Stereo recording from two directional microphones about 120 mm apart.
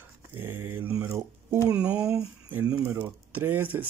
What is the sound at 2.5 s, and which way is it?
Speech, 15° right (ahead or behind).